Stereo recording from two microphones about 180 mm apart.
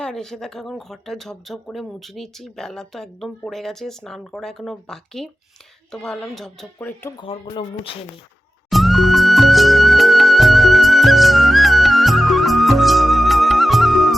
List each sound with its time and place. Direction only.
0.0 s speech: 5° left (ahead or behind)
7.2 s speech: 30° left (ahead or behind)
8.7 s music: centre (ahead or behind)